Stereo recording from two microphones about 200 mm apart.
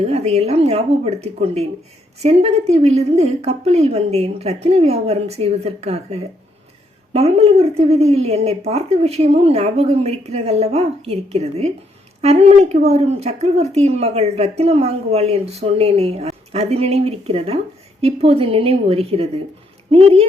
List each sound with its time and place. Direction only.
0.0 s a woman's voice: 30° right (ahead or behind)